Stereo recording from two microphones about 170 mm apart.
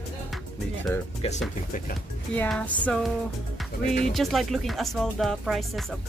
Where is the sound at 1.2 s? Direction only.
35° left (ahead or behind).